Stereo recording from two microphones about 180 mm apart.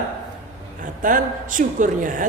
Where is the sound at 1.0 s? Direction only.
50° right (ahead or behind).